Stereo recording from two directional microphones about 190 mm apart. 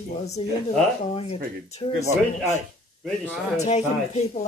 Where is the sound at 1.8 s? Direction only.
25° left (ahead or behind).